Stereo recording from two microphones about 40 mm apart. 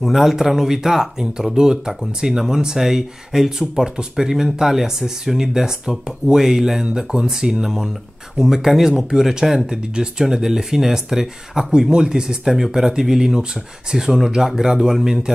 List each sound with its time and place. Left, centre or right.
0.1 s speech: centre